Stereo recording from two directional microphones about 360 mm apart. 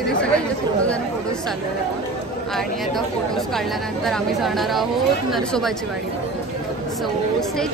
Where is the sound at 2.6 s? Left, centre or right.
Centre.